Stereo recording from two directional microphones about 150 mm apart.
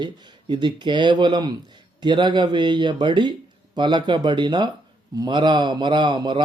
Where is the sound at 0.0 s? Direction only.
30° right (ahead or behind).